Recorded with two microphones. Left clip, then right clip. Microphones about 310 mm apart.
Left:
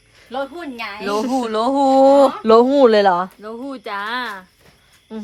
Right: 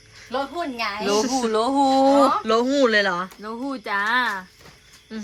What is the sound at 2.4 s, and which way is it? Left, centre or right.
Speech, centre.